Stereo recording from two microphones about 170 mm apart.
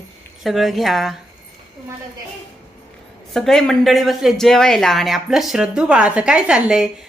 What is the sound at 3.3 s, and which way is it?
Speech, 5° left (ahead or behind).